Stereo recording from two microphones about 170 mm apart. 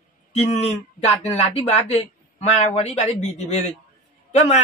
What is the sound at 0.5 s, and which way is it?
Speech, 40° left (ahead or behind).